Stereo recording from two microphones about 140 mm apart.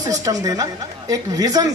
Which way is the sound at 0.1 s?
25° right (ahead or behind).